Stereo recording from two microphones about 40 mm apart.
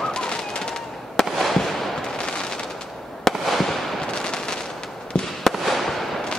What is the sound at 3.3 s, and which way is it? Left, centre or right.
Fireworks, centre.